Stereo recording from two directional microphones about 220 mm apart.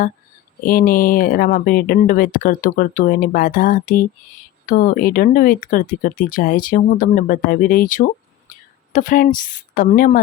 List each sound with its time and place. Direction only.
0.6 s speech: 40° left (ahead or behind)